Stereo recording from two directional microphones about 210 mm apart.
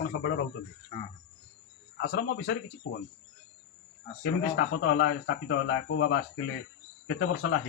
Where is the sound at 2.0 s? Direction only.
50° left (ahead or behind).